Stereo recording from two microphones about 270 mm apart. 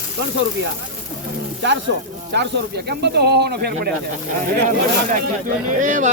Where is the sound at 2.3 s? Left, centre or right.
Right.